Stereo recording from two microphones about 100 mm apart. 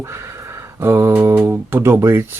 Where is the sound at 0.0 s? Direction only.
25° right (ahead or behind).